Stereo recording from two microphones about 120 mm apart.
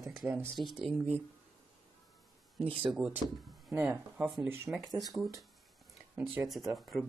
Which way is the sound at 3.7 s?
15° right (ahead or behind).